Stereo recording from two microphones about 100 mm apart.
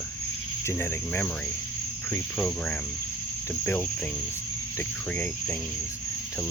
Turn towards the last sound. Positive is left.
turn(degrees=15)  # may be behind; listen again after turning